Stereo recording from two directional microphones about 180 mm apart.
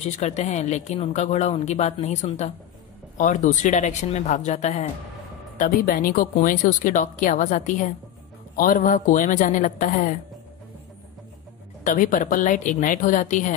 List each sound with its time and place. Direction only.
0.0 s a woman's voice: 40° left (ahead or behind)
11.8 s a woman's voice: 50° left (ahead or behind)